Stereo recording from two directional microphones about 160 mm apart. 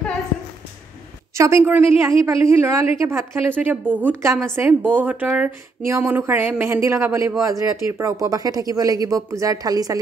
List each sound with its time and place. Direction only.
1.3 s speech: 15° right (ahead or behind)